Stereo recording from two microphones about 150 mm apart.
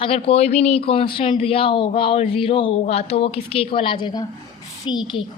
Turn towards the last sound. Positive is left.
turn(degrees=30)  # may be behind; listen again after turning